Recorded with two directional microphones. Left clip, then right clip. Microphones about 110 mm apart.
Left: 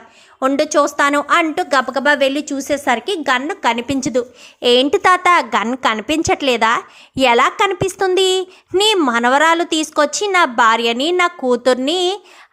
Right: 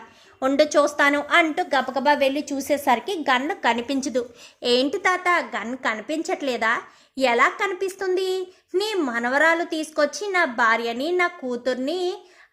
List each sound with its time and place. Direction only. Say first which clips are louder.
0.3 s a woman's voice: left 4 dB; 35° left (ahead or behind)
2.6 s a woman's voice: left 3 dB; 20° left (ahead or behind)
4.9 s speech: left 9 dB; 50° left (ahead or behind)
6.4 s a woman's voice: left 8 dB; 40° left (ahead or behind)
7.8 s speech: left 9 dB; 50° left (ahead or behind)
11.4 s speech: left 11 dB; 60° left (ahead or behind)
11.8 s a woman's voice: left 8 dB; 40° left (ahead or behind)